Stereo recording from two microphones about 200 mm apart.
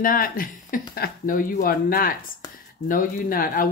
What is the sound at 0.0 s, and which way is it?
Speech, 45° left (ahead or behind).